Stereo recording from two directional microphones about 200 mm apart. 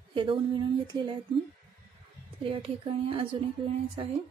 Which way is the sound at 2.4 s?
25° right (ahead or behind).